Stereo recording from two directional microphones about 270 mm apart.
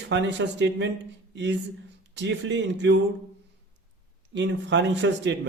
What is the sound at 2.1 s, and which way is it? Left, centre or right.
Speech, right.